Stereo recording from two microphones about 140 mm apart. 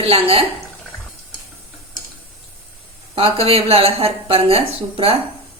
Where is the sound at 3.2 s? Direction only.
45° right (ahead or behind).